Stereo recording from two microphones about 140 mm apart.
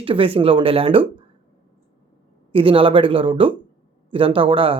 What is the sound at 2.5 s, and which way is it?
Speech, 40° right (ahead or behind).